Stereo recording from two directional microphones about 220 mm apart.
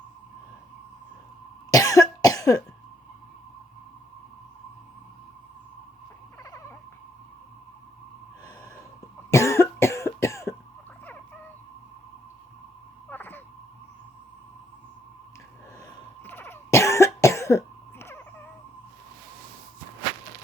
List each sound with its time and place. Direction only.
1.7 s cough: 15° left (ahead or behind)
6.4 s cat: 15° left (ahead or behind)
9.3 s cough: 15° left (ahead or behind)
13.1 s a sound: 10° left (ahead or behind)
16.2 s cough: 10° left (ahead or behind)